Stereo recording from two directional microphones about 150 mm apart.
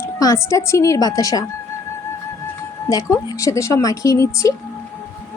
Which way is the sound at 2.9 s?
20° left (ahead or behind).